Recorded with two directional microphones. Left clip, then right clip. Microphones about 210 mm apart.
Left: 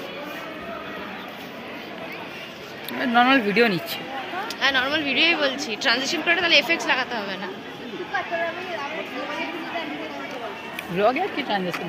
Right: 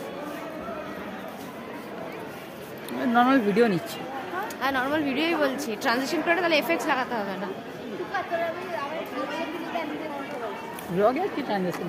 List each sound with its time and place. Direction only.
2.9 s speech: 10° right (ahead or behind)
4.6 s a woman's voice: 40° right (ahead or behind)
11.0 s speech: 10° right (ahead or behind)